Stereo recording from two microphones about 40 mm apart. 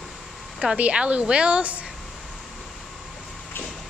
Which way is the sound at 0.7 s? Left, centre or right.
Right.